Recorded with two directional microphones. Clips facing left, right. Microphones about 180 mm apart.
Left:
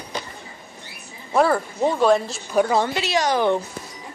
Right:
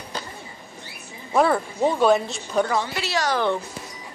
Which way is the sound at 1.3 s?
Centre (ahead or behind).